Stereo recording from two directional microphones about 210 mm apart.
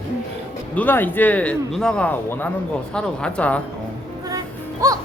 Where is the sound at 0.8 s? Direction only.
10° left (ahead or behind).